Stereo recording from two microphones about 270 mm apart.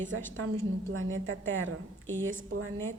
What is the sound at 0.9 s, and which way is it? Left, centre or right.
A woman's voice, right.